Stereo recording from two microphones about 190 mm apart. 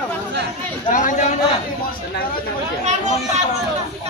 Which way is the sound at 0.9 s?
40° left (ahead or behind).